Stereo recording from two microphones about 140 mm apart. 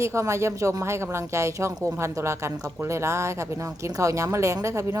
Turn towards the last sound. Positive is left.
turn(degrees=-20)  # may be behind; listen again after turning